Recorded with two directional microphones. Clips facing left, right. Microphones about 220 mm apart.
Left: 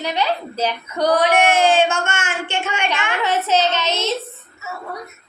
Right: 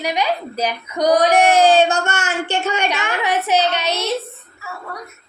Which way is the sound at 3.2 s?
15° right (ahead or behind).